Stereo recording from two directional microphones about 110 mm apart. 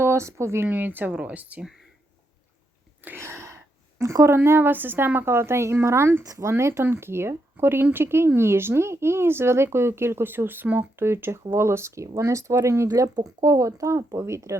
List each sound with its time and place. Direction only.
0.0 s speech: 25° right (ahead or behind)
3.0 s a sound: 20° right (ahead or behind)
4.4 s a woman's voice: 20° right (ahead or behind)